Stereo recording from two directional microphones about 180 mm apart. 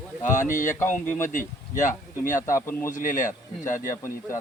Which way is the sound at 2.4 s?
15° left (ahead or behind).